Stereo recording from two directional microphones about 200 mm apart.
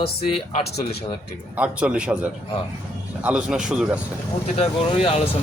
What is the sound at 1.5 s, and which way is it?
Speech, 5° right (ahead or behind).